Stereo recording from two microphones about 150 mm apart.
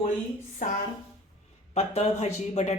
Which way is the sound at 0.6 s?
55° left (ahead or behind).